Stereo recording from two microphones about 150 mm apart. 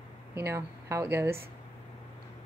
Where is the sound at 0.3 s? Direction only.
20° right (ahead or behind).